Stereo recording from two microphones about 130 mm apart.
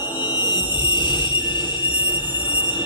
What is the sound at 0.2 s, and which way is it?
Music, 35° left (ahead or behind).